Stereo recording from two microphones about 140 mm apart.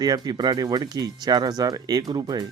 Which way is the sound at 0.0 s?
30° right (ahead or behind).